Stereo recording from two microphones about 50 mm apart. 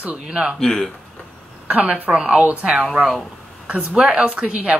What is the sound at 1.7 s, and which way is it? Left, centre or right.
Speech, right.